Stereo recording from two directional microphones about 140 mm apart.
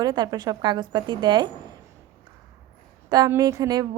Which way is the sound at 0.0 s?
30° right (ahead or behind).